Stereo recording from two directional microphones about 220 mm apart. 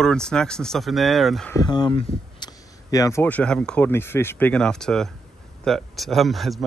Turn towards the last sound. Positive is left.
turn(degrees=0)  # may be behind; listen again after turning